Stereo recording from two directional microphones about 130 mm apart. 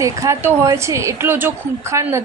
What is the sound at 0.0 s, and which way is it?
Speech, 25° right (ahead or behind).